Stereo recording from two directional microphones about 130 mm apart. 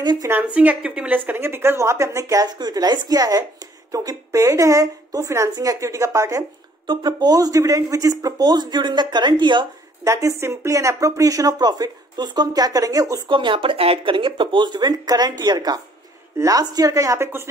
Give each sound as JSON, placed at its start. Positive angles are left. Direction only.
{"t": 0.0, "sound": "speech", "side_deg": -35}
{"t": 0.3, "sound": "speech", "side_deg": -10}
{"t": 6.9, "sound": "speech", "side_deg": -35}
{"t": 10.0, "sound": "speech", "side_deg": -25}
{"t": 13.3, "sound": "speech", "side_deg": -40}